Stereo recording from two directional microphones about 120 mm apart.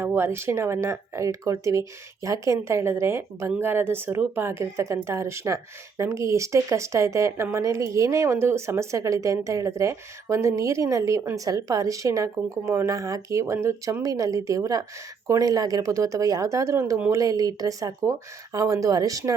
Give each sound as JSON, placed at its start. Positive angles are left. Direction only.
{"t": 0.0, "sound": "a woman's voice", "side_deg": -20}